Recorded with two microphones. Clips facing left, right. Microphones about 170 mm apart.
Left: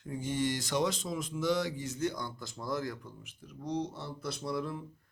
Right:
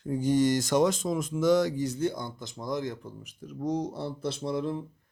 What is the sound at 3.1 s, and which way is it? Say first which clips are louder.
Speech: right 7 dB; 45° right (ahead or behind).